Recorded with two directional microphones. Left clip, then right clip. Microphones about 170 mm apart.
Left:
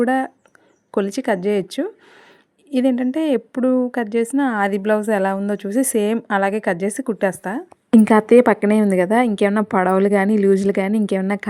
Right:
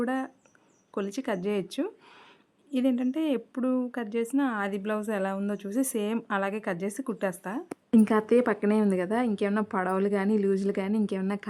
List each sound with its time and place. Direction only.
0.0 s a woman's voice: 30° left (ahead or behind)